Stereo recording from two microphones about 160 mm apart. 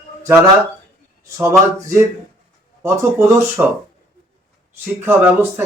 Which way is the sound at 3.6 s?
10° right (ahead or behind).